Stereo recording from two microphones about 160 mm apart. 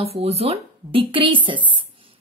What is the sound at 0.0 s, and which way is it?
Speech, 40° right (ahead or behind).